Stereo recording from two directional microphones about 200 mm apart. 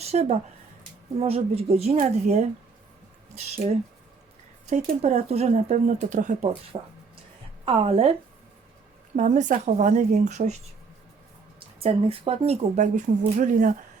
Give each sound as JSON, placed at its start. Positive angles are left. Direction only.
{"t": 0.0, "sound": "speech", "side_deg": -30}
{"t": 4.6, "sound": "speech", "side_deg": -35}
{"t": 6.7, "sound": "a woman's voice", "side_deg": -25}
{"t": 9.1, "sound": "speech", "side_deg": -40}
{"t": 11.8, "sound": "speech", "side_deg": -30}